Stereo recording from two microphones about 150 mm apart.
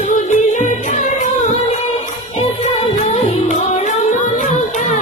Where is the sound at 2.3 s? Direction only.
45° left (ahead or behind).